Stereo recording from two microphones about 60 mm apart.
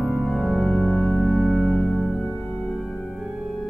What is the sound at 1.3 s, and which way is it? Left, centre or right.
Music, centre.